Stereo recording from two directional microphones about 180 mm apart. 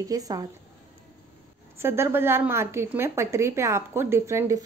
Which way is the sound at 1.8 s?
15° right (ahead or behind).